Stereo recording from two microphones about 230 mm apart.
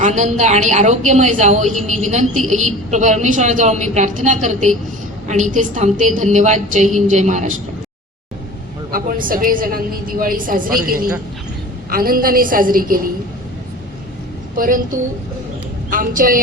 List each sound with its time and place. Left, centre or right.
0.0 s a woman's voice: right
8.9 s a woman's voice: right
14.5 s a woman's voice: right
15.9 s a woman's voice: right